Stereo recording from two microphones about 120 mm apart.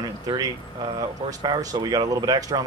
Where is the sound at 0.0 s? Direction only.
35° right (ahead or behind).